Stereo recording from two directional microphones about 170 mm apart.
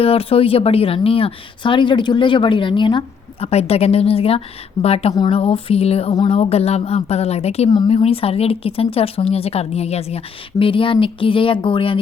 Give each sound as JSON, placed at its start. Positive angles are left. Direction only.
{"t": 0.0, "sound": "speech", "side_deg": 35}